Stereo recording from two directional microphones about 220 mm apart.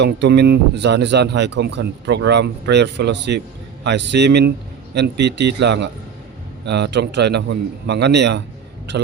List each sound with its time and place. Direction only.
0.0 s speech: 50° right (ahead or behind)